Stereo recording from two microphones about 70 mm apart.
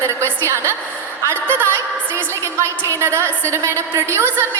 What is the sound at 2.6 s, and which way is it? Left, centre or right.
A woman's voice, right.